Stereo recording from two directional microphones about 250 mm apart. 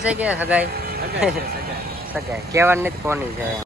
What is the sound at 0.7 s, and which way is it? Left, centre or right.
Vehicle, right.